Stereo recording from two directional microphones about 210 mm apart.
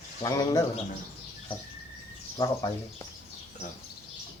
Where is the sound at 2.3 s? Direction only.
15° left (ahead or behind).